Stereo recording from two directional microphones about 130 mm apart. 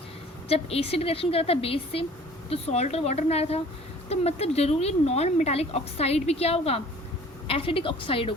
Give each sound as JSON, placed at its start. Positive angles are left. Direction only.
{"t": 0.4, "sound": "speech", "side_deg": 50}